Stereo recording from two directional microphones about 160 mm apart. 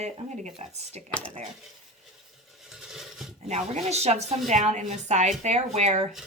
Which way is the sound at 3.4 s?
45° right (ahead or behind).